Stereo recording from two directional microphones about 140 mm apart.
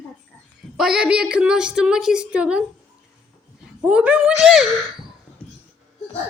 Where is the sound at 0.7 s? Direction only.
5° right (ahead or behind).